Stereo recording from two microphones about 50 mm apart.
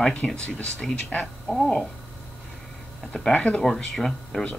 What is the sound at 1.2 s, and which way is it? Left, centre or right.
Speech, centre.